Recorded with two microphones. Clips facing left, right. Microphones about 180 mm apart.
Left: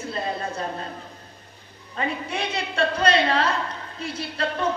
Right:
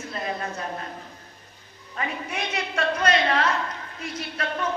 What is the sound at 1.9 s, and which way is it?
A woman's voice, 30° left (ahead or behind).